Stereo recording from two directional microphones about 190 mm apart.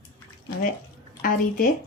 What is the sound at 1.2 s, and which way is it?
Speech, 50° left (ahead or behind).